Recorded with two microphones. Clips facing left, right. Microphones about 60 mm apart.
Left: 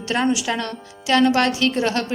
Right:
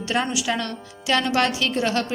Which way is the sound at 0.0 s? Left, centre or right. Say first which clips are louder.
Left 3 dB; centre.